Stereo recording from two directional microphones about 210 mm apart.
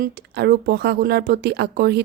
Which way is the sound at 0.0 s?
50° right (ahead or behind).